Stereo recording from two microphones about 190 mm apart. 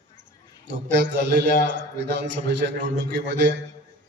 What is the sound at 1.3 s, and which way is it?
A man's voice, 65° right (ahead or behind).